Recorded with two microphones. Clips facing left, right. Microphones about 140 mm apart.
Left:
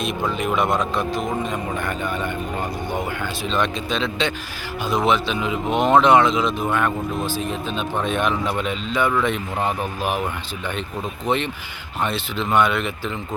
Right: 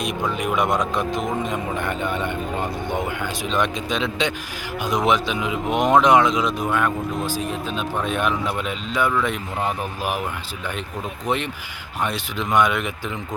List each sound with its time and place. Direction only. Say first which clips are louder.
0.3 s speech: even; 15° right (ahead or behind)
12.0 s speech: left 2 dB; 10° right (ahead or behind)